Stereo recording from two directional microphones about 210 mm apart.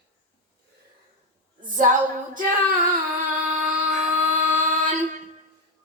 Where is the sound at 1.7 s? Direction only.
40° right (ahead or behind).